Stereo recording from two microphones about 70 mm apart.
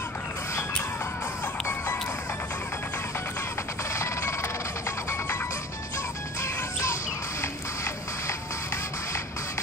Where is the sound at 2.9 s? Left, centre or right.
Left.